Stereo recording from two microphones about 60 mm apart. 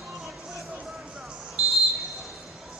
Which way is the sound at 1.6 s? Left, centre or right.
Centre.